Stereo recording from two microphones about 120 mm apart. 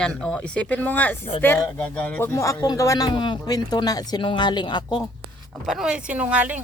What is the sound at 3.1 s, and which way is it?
Speech, 40° left (ahead or behind).